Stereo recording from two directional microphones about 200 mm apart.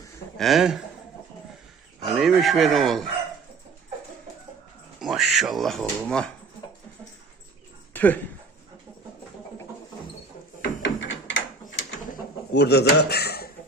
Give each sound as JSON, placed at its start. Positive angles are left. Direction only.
{"t": 0.3, "sound": "speech", "side_deg": 0}
{"t": 2.0, "sound": "speech", "side_deg": 0}
{"t": 4.9, "sound": "speech", "side_deg": 0}
{"t": 7.9, "sound": "speech", "side_deg": 10}
{"t": 10.6, "sound": "a sound", "side_deg": 60}
{"t": 12.5, "sound": "speech", "side_deg": 55}